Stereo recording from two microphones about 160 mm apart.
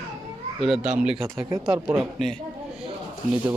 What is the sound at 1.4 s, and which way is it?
Speech, 20° right (ahead or behind).